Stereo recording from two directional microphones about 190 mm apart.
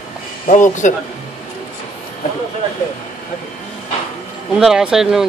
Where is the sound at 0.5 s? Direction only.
40° left (ahead or behind).